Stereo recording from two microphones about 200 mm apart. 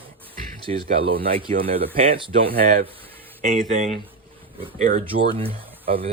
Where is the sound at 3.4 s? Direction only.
35° right (ahead or behind).